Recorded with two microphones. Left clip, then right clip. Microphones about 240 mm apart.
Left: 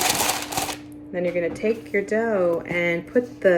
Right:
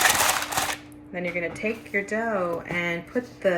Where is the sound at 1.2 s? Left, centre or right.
Right.